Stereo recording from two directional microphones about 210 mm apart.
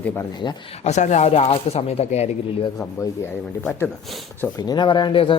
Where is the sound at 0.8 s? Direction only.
35° left (ahead or behind).